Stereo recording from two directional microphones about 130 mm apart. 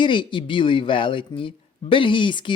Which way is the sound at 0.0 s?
40° left (ahead or behind).